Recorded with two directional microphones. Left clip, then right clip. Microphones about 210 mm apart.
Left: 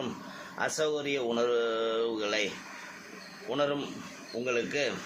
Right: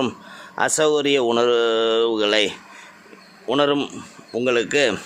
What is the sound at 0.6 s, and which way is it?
Speech, 55° right (ahead or behind).